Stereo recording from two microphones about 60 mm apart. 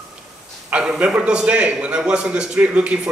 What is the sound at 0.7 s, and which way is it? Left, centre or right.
A man's voice, centre.